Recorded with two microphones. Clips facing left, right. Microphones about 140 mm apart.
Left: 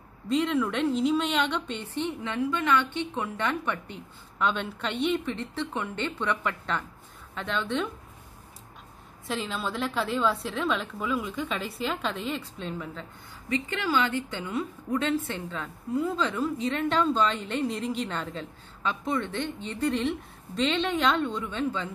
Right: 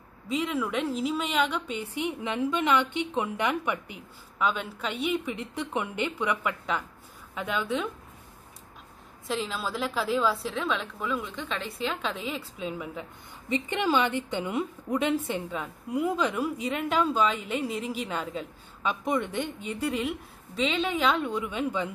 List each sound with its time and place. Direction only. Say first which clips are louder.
0.3 s a woman's voice: left 3 dB; 5° right (ahead or behind)
9.3 s a woman's voice: even; centre (ahead or behind)